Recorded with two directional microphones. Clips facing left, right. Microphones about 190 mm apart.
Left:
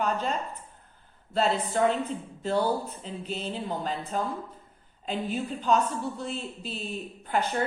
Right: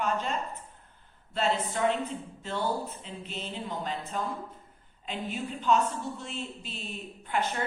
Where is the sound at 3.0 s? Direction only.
35° left (ahead or behind).